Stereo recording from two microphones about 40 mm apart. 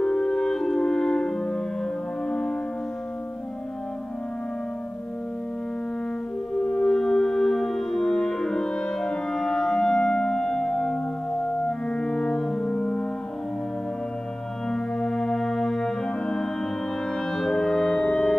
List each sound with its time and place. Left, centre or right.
0.0 s french horn: left
6.7 s french horn: centre
11.4 s music: left
14.7 s music: centre